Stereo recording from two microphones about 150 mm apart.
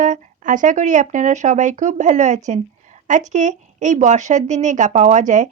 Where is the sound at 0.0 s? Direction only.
60° right (ahead or behind).